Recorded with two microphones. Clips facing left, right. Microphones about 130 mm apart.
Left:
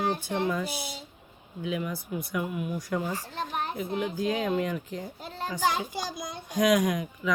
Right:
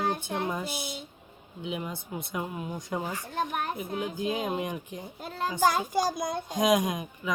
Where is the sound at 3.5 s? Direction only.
50° right (ahead or behind).